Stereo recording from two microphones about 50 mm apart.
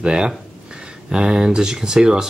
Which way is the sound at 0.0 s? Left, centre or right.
Centre.